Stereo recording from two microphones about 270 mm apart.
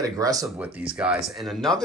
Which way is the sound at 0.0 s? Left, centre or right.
Centre.